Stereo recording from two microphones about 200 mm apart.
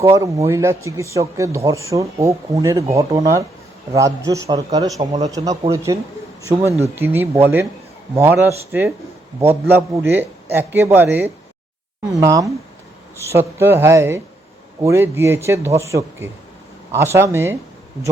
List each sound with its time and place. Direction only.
0.1 s a man's voice: 15° right (ahead or behind)